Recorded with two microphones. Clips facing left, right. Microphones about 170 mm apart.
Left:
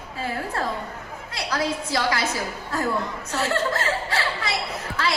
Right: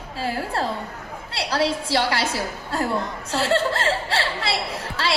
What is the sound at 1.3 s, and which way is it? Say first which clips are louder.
A woman's voice: right 3 dB; 30° right (ahead or behind).